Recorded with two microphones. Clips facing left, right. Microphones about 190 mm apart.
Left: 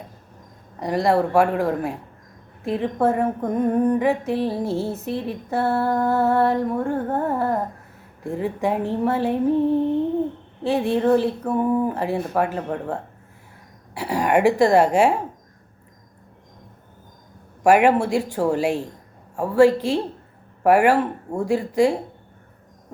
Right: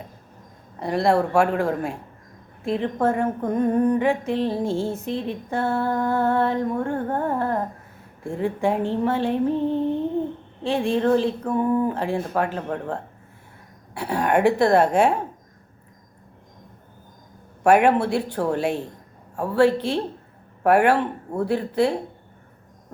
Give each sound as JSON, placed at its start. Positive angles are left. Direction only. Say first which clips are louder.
{"t": 0.8, "sound": "speech", "louder": "left 1 dB", "side_deg": 0}
{"t": 14.0, "sound": "speech", "louder": "left 1 dB", "side_deg": 5}
{"t": 17.6, "sound": "speech", "louder": "left 1 dB", "side_deg": 5}